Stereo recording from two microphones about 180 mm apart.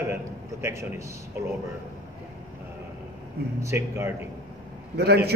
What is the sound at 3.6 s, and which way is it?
Speech, 15° right (ahead or behind).